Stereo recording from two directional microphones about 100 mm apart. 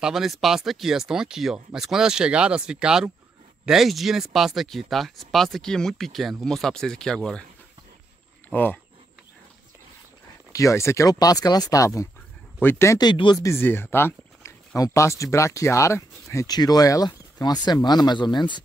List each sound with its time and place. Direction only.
0.0 s speech: 5° right (ahead or behind)
10.5 s speech: 30° left (ahead or behind)
12.5 s speech: 20° left (ahead or behind)
13.0 s speech: 55° left (ahead or behind)
13.4 s speech: 25° left (ahead or behind)
16.4 s speech: 40° left (ahead or behind)